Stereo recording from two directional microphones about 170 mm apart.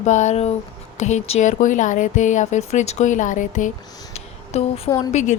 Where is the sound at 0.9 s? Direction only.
45° left (ahead or behind).